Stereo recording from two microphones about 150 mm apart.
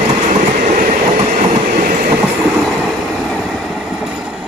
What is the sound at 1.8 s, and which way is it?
Train, 70° right (ahead or behind).